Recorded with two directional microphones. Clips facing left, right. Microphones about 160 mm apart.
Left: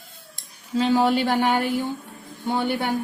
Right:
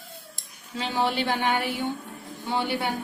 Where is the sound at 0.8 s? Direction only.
40° left (ahead or behind).